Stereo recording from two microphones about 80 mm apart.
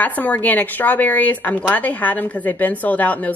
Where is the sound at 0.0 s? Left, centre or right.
Left.